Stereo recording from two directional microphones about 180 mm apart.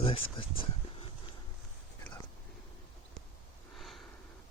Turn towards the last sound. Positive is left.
turn(degrees=0)  # may be behind; listen again after turning